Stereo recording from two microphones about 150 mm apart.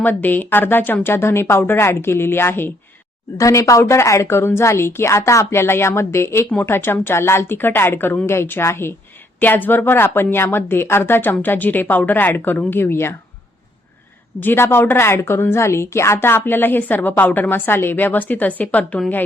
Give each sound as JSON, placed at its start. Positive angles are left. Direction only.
{"t": 0.0, "sound": "a woman's voice", "side_deg": 10}
{"t": 14.4, "sound": "a woman's voice", "side_deg": 15}